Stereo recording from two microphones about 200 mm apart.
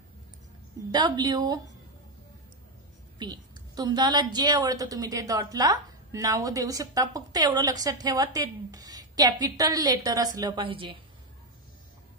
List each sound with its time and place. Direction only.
0.9 s a woman's voice: 20° right (ahead or behind)
3.2 s a woman's voice: 20° right (ahead or behind)